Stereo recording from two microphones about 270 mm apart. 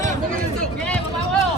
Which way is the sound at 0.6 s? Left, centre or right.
Centre.